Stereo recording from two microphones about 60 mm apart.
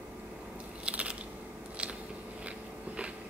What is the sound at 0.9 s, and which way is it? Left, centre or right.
Biting, right.